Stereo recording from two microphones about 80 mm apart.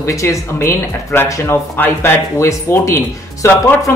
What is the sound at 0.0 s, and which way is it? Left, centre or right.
Speech, left.